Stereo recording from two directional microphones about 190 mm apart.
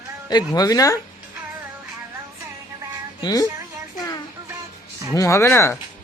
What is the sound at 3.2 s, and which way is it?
Speech, 20° left (ahead or behind).